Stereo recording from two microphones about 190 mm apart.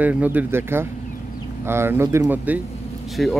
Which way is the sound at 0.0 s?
10° right (ahead or behind).